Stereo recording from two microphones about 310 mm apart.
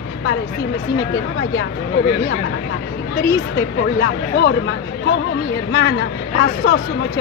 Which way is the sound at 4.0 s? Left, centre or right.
Left.